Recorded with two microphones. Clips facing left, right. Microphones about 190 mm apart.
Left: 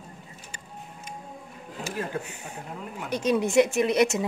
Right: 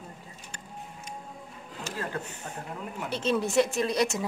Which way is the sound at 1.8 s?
10° left (ahead or behind).